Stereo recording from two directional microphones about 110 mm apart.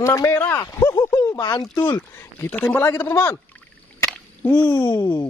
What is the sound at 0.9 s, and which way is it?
Speech, 40° left (ahead or behind).